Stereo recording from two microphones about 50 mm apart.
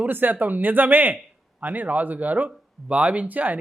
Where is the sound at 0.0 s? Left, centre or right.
Right.